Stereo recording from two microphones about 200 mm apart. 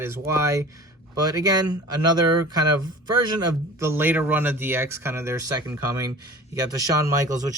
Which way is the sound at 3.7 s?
10° right (ahead or behind).